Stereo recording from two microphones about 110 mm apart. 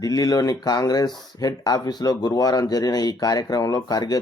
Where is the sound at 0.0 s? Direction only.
35° left (ahead or behind).